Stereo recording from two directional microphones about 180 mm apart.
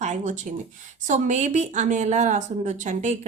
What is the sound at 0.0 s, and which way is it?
Speech, 40° right (ahead or behind).